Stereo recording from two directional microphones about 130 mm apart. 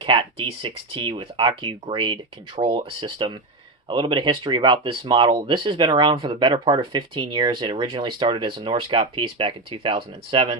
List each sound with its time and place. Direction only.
0.0 s speech: 40° right (ahead or behind)